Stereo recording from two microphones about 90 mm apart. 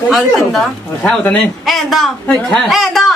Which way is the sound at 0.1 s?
Centre (ahead or behind).